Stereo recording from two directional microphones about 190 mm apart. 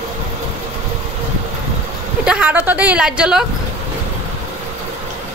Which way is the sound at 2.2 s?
5° right (ahead or behind).